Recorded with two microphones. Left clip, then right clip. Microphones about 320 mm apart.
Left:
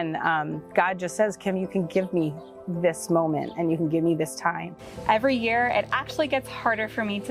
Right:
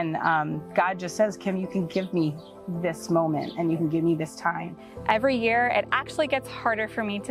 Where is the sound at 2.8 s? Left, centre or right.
Left.